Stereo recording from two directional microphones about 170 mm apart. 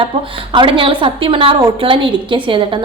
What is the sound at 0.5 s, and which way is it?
A woman's voice, 30° right (ahead or behind).